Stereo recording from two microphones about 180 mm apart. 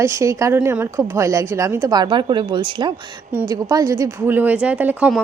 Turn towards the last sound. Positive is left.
turn(degrees=-10)  # may be behind; listen again after turning